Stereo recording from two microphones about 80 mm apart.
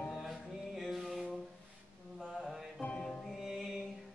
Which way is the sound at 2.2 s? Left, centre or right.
Centre.